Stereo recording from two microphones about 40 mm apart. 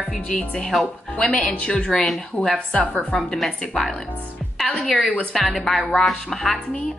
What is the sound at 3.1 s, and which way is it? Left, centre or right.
Speech, left.